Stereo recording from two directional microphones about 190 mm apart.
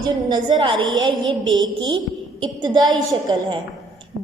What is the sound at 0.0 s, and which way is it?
A woman's voice, 20° right (ahead or behind).